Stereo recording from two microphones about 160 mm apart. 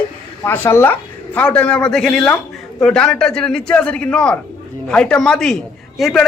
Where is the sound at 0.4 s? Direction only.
10° left (ahead or behind).